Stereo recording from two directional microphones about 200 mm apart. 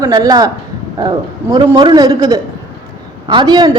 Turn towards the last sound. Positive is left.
turn(degrees=-20)  # may be behind; listen again after turning